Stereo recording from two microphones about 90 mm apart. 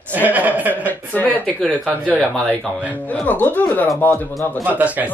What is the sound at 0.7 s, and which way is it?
Speech, 20° left (ahead or behind).